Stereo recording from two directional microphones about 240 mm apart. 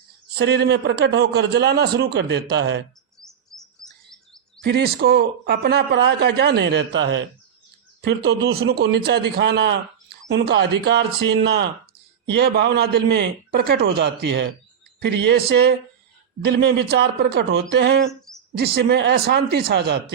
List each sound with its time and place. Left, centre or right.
0.3 s a man's voice: right
3.2 s chirp: centre
4.6 s a man's voice: right